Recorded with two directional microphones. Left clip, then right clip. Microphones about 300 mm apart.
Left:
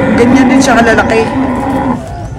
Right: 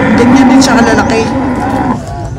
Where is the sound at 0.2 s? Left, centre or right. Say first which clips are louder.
Right 1 dB; centre.